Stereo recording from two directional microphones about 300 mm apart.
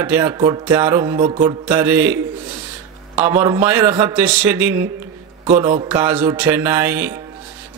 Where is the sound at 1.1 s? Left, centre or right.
Centre.